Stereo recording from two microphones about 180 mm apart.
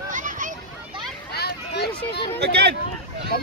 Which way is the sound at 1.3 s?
65° left (ahead or behind).